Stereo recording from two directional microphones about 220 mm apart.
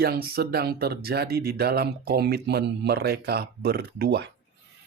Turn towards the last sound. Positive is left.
turn(degrees=-45)  # may be behind; listen again after turning